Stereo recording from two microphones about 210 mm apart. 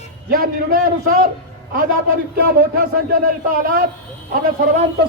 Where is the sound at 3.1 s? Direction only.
40° right (ahead or behind).